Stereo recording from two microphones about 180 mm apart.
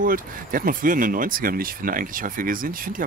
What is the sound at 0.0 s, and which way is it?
Speech, 50° right (ahead or behind).